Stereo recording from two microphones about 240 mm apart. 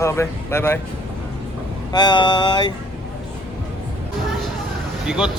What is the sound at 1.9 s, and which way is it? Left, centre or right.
Speech, centre.